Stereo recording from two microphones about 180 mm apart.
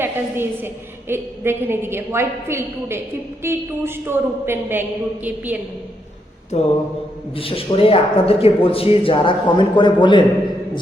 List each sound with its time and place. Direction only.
0.0 s a woman's voice: 10° right (ahead or behind)
6.5 s speech: 35° left (ahead or behind)